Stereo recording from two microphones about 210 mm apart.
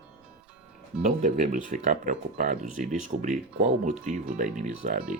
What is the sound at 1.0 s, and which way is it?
Speech, 35° right (ahead or behind).